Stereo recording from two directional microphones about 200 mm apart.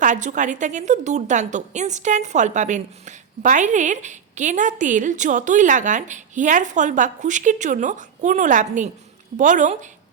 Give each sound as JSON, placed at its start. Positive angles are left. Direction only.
{"t": 0.0, "sound": "a woman's voice", "side_deg": -40}